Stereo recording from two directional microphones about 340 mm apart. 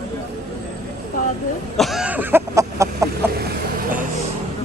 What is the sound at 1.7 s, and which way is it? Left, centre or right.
Speech, centre.